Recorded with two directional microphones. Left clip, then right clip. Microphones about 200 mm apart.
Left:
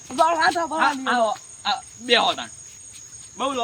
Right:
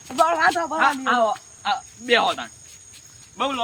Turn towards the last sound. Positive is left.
turn(degrees=-5)  # may be behind; listen again after turning